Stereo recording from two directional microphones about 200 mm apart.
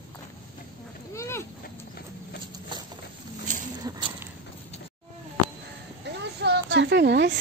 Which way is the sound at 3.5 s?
40° right (ahead or behind).